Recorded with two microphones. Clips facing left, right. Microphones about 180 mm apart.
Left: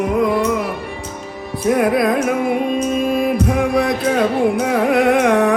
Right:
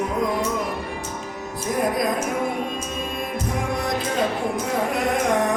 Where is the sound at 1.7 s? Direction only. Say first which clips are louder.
Left 7 dB; 70° left (ahead or behind).